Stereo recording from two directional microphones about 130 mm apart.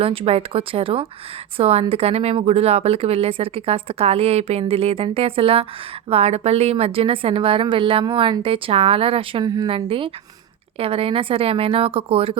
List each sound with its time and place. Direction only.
0.0 s speech: 45° right (ahead or behind)